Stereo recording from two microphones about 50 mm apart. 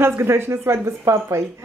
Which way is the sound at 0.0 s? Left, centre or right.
Right.